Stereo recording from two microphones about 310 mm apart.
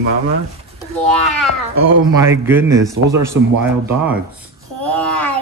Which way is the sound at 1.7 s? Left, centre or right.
Right.